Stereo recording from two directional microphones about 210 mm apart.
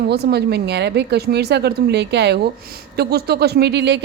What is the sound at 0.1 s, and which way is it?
Speech, 50° right (ahead or behind).